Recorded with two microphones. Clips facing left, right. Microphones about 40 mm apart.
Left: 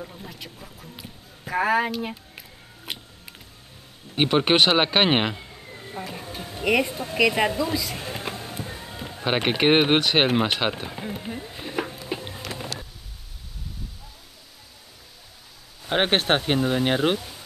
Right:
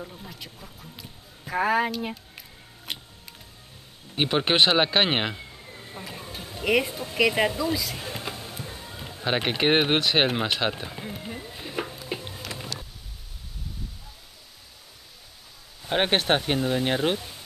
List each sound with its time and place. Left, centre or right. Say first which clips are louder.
0.0 s a sound: left 2 dB; centre
4.3 s speech: left 2 dB; centre
8.1 s music: left 2 dB; centre
15.9 s speech: left 1 dB; centre